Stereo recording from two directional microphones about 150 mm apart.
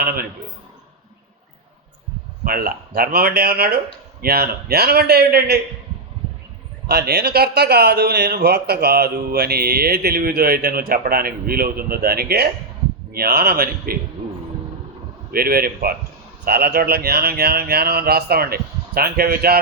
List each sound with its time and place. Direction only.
0.0 s a man's voice: 80° right
2.4 s a man's voice: 70° right (ahead or behind); by 5.5 s 90° right
6.8 s a man's voice: 90° right
15.3 s a man's voice: 85° right